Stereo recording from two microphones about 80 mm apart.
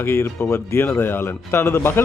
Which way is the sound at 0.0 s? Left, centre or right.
Left.